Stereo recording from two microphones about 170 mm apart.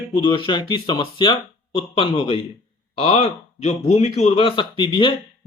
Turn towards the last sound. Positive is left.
turn(degrees=30)  # may be behind; listen again after turning